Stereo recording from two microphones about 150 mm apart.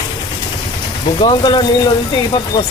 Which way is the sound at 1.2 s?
30° left (ahead or behind).